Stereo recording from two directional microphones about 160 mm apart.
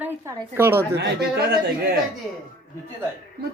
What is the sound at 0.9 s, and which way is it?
A woman's voice, 90° right.